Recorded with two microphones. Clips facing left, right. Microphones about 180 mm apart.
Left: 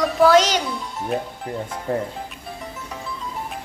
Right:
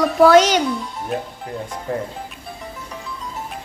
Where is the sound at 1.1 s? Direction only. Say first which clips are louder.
Even; centre (ahead or behind).